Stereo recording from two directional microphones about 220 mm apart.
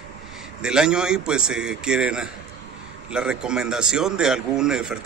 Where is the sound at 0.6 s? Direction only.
5° right (ahead or behind).